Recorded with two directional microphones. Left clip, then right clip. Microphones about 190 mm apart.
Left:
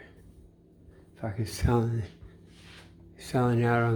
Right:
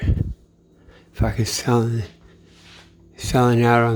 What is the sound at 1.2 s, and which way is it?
Speech, 35° right (ahead or behind).